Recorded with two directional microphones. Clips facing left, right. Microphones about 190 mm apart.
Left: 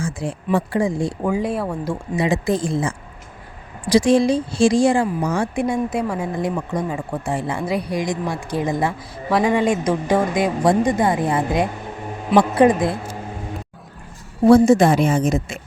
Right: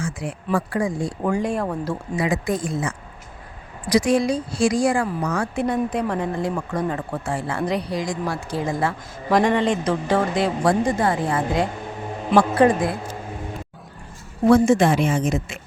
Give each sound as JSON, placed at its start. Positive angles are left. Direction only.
{"t": 0.0, "sound": "speech", "side_deg": 30}
{"t": 1.2, "sound": "speech", "side_deg": 5}
{"t": 1.7, "sound": "speech", "side_deg": 15}
{"t": 2.2, "sound": "speech", "side_deg": 25}
{"t": 5.5, "sound": "speech", "side_deg": 10}
{"t": 14.4, "sound": "speech", "side_deg": 35}